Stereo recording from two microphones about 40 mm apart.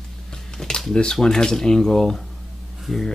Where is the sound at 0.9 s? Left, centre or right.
Centre.